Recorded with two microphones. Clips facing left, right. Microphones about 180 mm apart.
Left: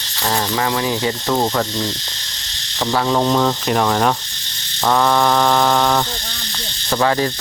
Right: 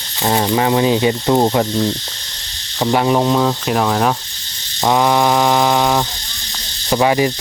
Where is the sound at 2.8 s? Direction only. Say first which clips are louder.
Right 3 dB; 20° right (ahead or behind).